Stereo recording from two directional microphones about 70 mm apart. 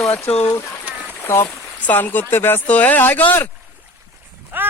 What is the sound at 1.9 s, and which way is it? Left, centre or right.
Speech, left.